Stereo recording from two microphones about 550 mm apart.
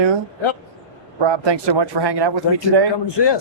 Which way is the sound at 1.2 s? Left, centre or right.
Right.